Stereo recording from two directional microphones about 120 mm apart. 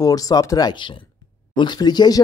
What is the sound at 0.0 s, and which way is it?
Speech, 30° left (ahead or behind).